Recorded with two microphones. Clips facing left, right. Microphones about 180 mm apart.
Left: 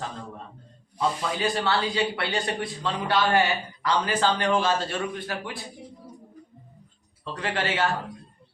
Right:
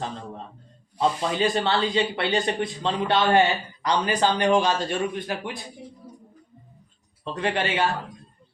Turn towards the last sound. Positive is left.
turn(degrees=-20)  # may be behind; listen again after turning